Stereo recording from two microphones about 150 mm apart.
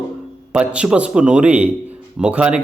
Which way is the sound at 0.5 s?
10° right (ahead or behind).